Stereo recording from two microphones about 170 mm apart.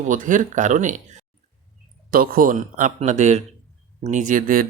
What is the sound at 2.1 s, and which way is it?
A man's voice, 55° right (ahead or behind).